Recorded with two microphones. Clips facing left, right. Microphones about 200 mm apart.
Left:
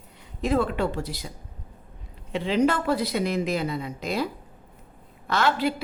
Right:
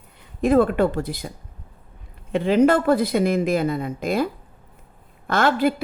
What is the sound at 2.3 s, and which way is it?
A woman's voice, 55° right (ahead or behind).